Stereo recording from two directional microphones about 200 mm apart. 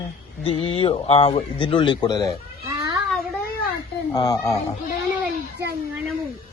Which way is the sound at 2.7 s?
15° right (ahead or behind).